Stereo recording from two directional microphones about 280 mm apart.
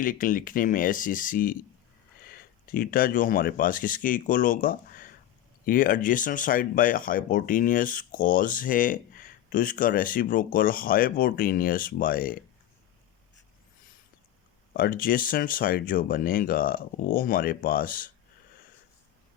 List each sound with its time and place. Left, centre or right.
0.0 s speech: left
14.7 s speech: left